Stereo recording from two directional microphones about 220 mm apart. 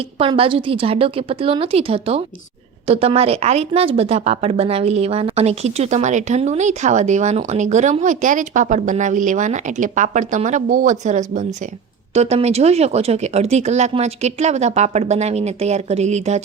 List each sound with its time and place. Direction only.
0.2 s a woman's voice: 25° right (ahead or behind)